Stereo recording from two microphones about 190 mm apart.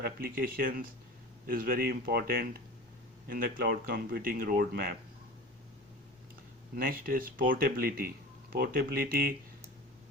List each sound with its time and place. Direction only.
0.0 s speech: 50° right (ahead or behind)
6.7 s speech: 50° right (ahead or behind)